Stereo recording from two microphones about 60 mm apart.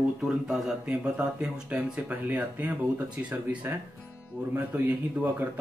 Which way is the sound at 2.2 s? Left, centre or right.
Right.